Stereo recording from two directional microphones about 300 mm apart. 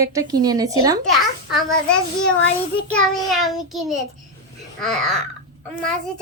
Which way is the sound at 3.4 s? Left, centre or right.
Centre.